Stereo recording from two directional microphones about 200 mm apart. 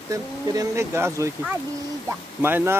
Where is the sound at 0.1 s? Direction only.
15° right (ahead or behind).